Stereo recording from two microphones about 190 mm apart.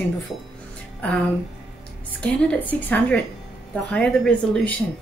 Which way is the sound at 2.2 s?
5° left (ahead or behind).